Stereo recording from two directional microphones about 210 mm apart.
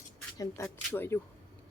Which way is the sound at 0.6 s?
10° left (ahead or behind).